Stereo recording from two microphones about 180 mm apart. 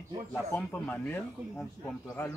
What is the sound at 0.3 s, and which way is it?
Speech, 10° left (ahead or behind).